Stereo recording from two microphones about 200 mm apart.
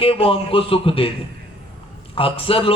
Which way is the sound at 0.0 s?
30° left (ahead or behind).